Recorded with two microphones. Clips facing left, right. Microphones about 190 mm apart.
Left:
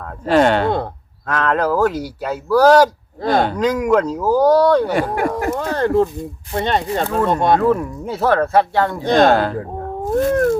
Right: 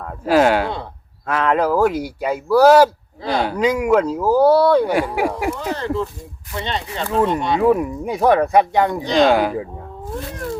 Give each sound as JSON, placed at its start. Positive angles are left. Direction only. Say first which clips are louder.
{"t": 0.0, "sound": "speech", "louder": "left 1 dB", "side_deg": -5}
{"t": 5.5, "sound": "speech", "louder": "left 6 dB", "side_deg": 55}
{"t": 7.6, "sound": "speech", "louder": "right 1 dB", "side_deg": -15}
{"t": 9.0, "sound": "speech", "louder": "left 4 dB", "side_deg": 50}
{"t": 9.3, "sound": "speech", "louder": "even", "side_deg": -10}
{"t": 10.0, "sound": "cat", "louder": "left 13 dB", "side_deg": 45}